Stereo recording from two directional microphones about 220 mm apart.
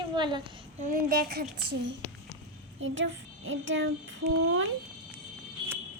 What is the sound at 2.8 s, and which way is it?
A child's voice, 60° right (ahead or behind).